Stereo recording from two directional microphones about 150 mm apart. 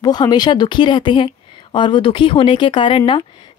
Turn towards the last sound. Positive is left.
turn(degrees=35)  # may be behind; listen again after turning